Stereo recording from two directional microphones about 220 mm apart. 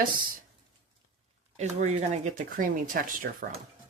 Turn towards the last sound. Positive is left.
turn(degrees=-40)  # may be behind; listen again after turning